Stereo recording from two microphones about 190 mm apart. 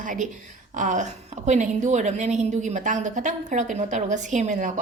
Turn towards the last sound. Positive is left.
turn(degrees=-40)  # may be behind; listen again after turning